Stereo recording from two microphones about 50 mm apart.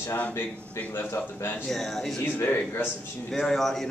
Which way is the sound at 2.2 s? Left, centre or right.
Left.